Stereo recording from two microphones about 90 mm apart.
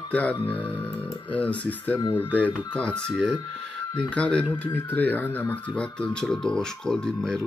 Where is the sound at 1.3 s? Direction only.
15° left (ahead or behind).